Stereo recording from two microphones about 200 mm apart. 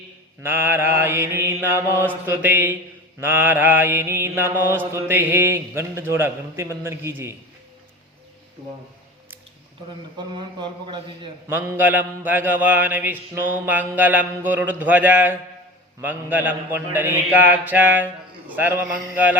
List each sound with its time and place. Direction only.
0.4 s mantra: 10° right (ahead or behind)
10.2 s a man's voice: 25° right (ahead or behind)
11.4 s mantra: 10° right (ahead or behind)